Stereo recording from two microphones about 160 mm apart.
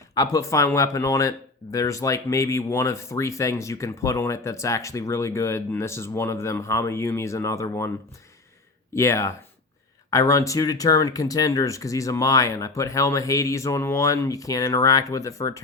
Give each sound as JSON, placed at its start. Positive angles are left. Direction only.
{"t": 0.1, "sound": "speech", "side_deg": 20}
{"t": 9.0, "sound": "speech", "side_deg": 15}